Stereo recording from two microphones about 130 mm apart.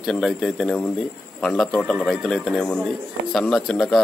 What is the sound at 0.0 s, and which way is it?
A man's voice, centre (ahead or behind).